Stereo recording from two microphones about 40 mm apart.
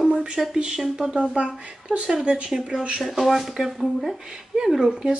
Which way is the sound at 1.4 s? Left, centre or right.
Right.